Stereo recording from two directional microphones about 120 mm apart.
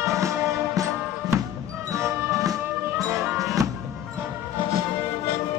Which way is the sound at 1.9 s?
25° right (ahead or behind).